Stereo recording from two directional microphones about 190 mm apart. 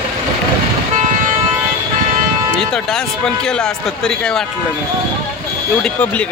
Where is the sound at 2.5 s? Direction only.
5° left (ahead or behind).